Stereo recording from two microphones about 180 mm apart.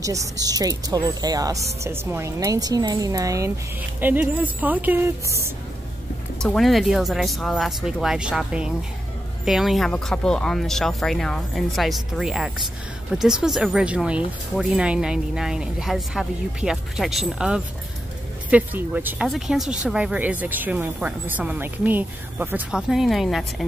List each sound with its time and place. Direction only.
0.0 s speech: 15° right (ahead or behind)
6.4 s speech: centre (ahead or behind)